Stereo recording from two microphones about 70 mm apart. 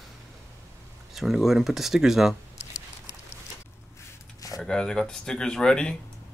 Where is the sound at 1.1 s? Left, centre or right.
Centre.